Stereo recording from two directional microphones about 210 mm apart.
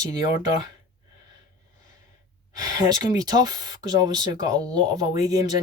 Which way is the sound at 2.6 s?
20° right (ahead or behind).